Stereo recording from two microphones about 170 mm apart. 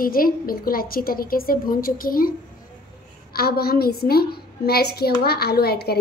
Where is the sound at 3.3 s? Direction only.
65° left (ahead or behind).